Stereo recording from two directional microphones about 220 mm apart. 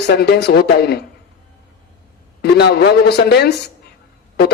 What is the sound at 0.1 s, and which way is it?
Speech, 50° left (ahead or behind).